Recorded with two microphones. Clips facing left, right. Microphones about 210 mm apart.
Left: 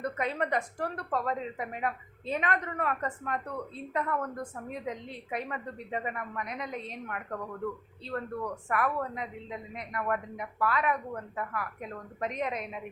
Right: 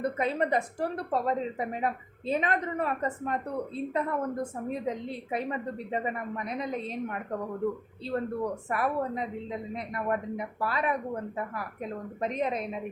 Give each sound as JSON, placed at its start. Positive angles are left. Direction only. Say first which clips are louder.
{"t": 0.0, "sound": "a woman's voice", "louder": "right 4 dB", "side_deg": -30}